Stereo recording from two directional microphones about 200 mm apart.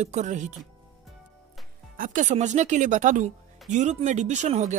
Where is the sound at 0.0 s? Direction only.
35° right (ahead or behind).